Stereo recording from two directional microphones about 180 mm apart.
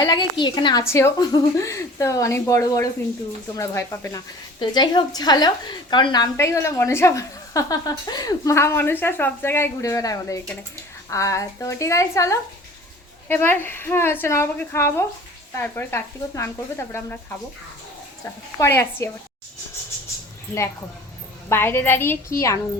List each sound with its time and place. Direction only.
0.0 s a woman's voice: 25° left (ahead or behind)
4.6 s a woman's voice: 25° left (ahead or behind)
18.6 s a woman's voice: 15° left (ahead or behind)
21.5 s a woman's voice: 10° left (ahead or behind)